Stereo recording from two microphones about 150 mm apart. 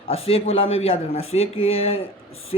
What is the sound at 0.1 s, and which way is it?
A man's voice, 40° left (ahead or behind).